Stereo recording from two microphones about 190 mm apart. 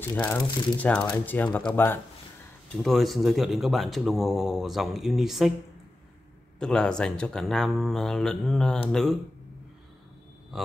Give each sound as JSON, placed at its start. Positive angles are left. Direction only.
{"t": 0.1, "sound": "speech", "side_deg": 10}
{"t": 6.6, "sound": "speech", "side_deg": 5}
{"t": 10.5, "sound": "speech", "side_deg": 0}